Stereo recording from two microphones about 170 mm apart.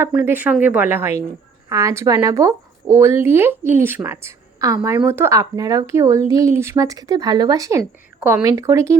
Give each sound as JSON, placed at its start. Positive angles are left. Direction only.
{"t": 0.0, "sound": "a woman's voice", "side_deg": -15}